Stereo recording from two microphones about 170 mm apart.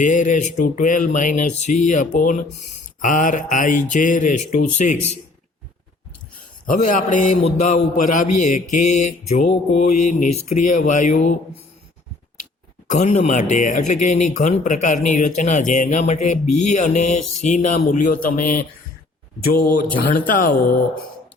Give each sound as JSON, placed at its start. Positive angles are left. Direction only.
{"t": 0.0, "sound": "speech", "side_deg": 45}
{"t": 6.8, "sound": "speech", "side_deg": 45}
{"t": 12.9, "sound": "speech", "side_deg": 40}
{"t": 20.1, "sound": "speech", "side_deg": 55}